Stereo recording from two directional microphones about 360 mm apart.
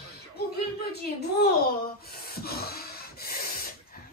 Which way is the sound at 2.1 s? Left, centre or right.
Left.